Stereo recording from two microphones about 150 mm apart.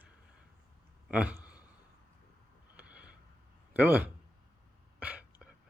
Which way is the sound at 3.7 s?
10° right (ahead or behind).